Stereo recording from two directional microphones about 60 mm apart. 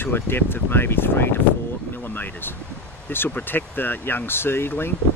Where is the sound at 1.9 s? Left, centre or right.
Left.